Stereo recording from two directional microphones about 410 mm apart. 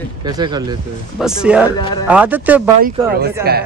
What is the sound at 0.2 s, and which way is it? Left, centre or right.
Speech, centre.